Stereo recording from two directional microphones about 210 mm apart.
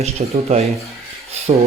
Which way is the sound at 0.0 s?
30° right (ahead or behind).